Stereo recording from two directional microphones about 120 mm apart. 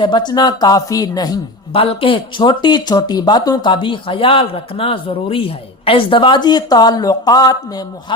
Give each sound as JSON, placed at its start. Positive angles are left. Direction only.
{"t": 0.0, "sound": "speech", "side_deg": 40}
{"t": 1.7, "sound": "speech", "side_deg": 50}